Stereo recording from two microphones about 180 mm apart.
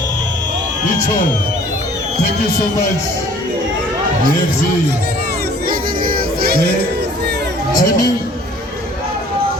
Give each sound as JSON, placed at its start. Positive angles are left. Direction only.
{"t": 5.6, "sound": "music", "side_deg": -55}
{"t": 7.7, "sound": "speech", "side_deg": 20}